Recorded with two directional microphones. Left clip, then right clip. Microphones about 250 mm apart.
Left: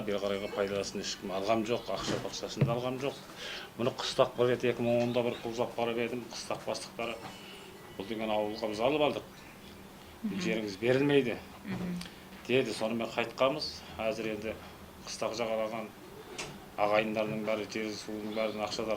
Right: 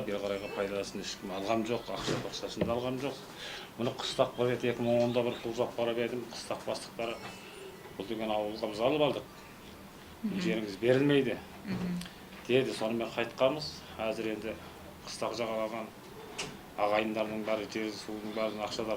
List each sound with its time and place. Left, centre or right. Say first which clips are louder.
0.1 s speech: left 4 dB; left
10.3 s speech: even; left
12.5 s speech: right 1 dB; left